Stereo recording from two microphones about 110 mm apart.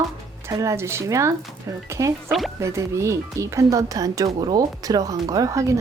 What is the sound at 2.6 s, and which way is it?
Speech, 25° right (ahead or behind).